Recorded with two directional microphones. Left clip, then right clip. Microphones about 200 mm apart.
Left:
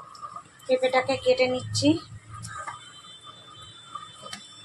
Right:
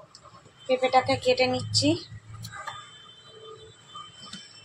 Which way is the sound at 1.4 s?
10° right (ahead or behind).